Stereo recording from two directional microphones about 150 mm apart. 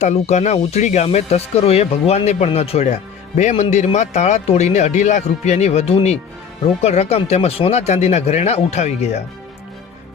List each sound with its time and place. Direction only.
0.0 s speech: 50° left (ahead or behind)